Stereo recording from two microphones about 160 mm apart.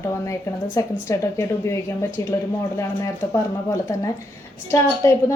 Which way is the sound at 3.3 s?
15° left (ahead or behind).